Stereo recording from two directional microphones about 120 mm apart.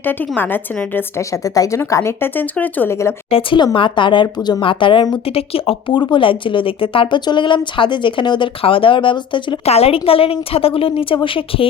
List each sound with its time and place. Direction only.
0.0 s a woman's voice: 15° left (ahead or behind)
1.5 s speech: 30° left (ahead or behind)
3.2 s a woman's voice: 45° left (ahead or behind)
9.6 s a woman's voice: 55° left (ahead or behind)